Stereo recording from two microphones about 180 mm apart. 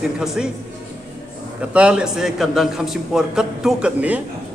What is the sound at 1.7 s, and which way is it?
A man's voice, 5° right (ahead or behind).